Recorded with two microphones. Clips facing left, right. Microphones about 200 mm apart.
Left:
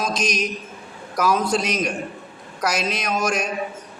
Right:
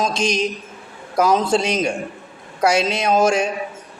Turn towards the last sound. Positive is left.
turn(degrees=-25)  # may be behind; listen again after turning